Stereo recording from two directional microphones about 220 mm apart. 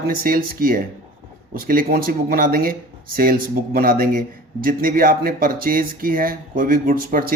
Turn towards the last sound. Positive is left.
turn(degrees=-40)  # may be behind; listen again after turning